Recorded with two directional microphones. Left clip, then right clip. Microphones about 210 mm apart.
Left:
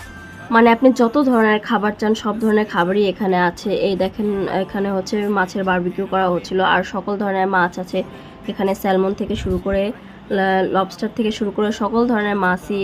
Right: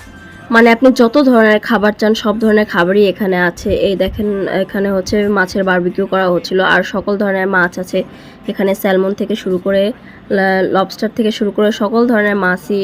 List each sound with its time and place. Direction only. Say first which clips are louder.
0.5 s speech: right 4 dB; 15° right (ahead or behind)